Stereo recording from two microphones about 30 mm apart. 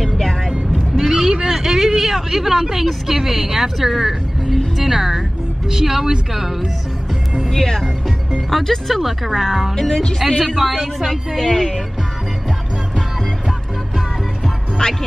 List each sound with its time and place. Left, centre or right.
0.0 s vehicle: centre
0.5 s vehicle: centre
1.5 s a woman's voice: centre
8.5 s a woman's voice: centre
9.8 s speech: centre
10.4 s a woman's voice: centre
11.4 s speech: centre
14.8 s speech: left